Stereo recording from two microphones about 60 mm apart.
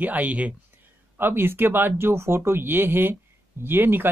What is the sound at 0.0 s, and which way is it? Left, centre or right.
Speech, right.